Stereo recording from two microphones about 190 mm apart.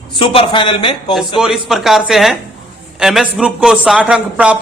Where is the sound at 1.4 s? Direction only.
Centre (ahead or behind).